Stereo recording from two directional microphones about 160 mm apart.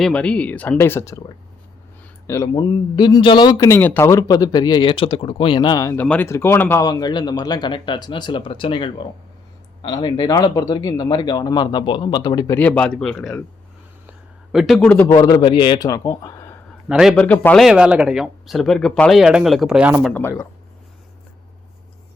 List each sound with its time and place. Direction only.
0.0 s speech: 5° left (ahead or behind); by 3.7 s 25° left (ahead or behind)
3.7 s speech: 15° left (ahead or behind)
12.5 s speech: 10° left (ahead or behind)
14.1 s a sound: centre (ahead or behind)
14.8 s speech: 10° left (ahead or behind)
15.1 s speech: 25° left (ahead or behind)
16.9 s speech: 5° right (ahead or behind)
17.2 s speech: 10° left (ahead or behind)
17.6 s speech: 5° right (ahead or behind)
20.1 s speech: 10° left (ahead or behind)